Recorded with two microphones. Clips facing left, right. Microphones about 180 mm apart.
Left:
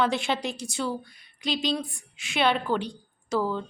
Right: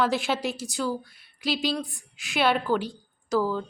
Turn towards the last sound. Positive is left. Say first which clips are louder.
# right 2 dB
turn(degrees=-5)  # may be behind; listen again after turning